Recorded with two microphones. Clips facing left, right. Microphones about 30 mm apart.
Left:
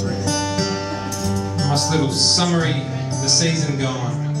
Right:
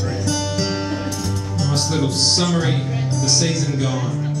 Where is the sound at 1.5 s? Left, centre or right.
Left.